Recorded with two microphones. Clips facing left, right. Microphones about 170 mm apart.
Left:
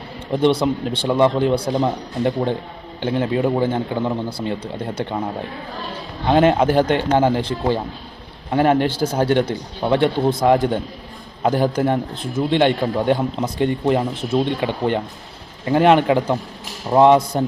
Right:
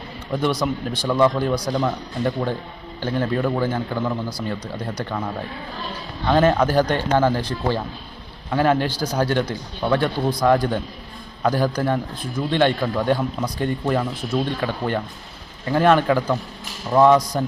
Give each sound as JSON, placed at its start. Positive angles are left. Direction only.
{"t": 0.3, "sound": "a man's voice", "side_deg": 25}
{"t": 6.2, "sound": "a man's voice", "side_deg": 15}